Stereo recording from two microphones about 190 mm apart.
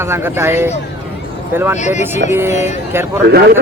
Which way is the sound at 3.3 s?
60° right (ahead or behind).